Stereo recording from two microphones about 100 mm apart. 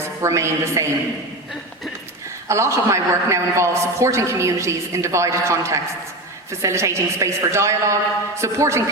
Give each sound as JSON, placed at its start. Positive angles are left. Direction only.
{"t": 0.0, "sound": "a woman's voice", "side_deg": -30}
{"t": 2.5, "sound": "a man's voice", "side_deg": -30}